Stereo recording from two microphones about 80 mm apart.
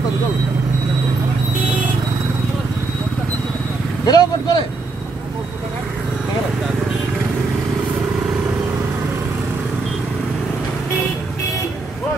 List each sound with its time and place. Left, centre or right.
4.0 s speech: left